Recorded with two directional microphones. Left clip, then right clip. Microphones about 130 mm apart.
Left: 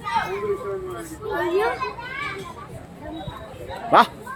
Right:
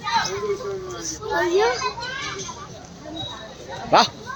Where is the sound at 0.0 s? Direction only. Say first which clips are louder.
Right 2 dB; 5° left (ahead or behind).